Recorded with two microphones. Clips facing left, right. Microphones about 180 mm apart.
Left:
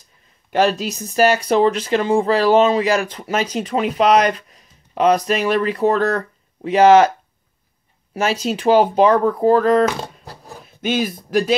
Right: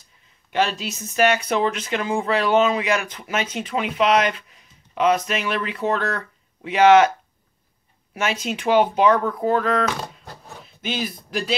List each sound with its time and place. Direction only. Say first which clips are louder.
0.5 s speech: left 6 dB; 45° left (ahead or behind)
8.1 s speech: left 5 dB; 35° left (ahead or behind)